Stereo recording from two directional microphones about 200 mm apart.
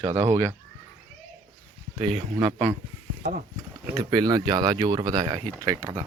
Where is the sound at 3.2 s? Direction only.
40° right (ahead or behind).